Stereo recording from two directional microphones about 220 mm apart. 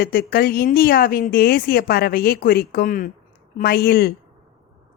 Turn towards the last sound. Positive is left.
turn(degrees=45)  # may be behind; listen again after turning